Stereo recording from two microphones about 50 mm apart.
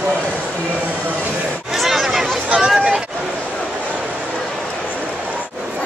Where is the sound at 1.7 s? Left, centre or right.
Centre.